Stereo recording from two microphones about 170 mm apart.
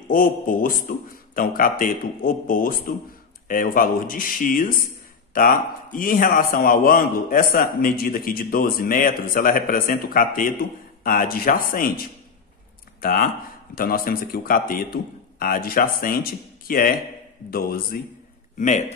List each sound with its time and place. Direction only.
0.1 s a man's voice: 55° left (ahead or behind)
18.6 s speech: 45° left (ahead or behind)